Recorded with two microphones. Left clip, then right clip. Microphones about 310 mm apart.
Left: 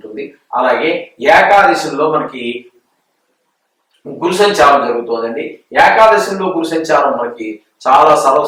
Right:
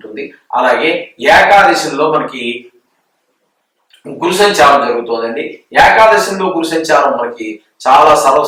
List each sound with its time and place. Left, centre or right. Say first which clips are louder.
0.7 s speech: right 2 dB; centre
4.2 s speech: right 1 dB; centre